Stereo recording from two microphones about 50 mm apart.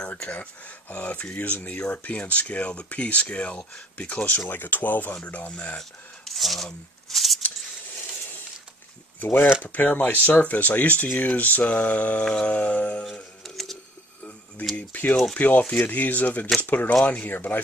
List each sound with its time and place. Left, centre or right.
0.3 s speech: left
4.5 s speech: left
5.8 s speech: centre
9.2 s speech: left
9.6 s speech: left
12.3 s speech: centre
12.5 s speech: left
14.9 s speech: left